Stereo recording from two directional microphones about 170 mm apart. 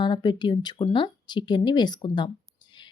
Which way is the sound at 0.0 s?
25° left (ahead or behind).